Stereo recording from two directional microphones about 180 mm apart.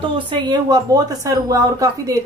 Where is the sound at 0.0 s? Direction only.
25° right (ahead or behind).